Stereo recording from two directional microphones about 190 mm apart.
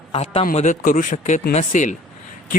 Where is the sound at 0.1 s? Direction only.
30° left (ahead or behind).